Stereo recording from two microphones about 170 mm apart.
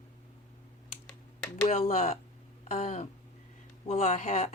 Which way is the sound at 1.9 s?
40° left (ahead or behind).